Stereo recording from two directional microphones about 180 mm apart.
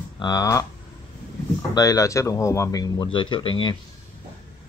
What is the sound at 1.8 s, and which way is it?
Speech, 20° left (ahead or behind).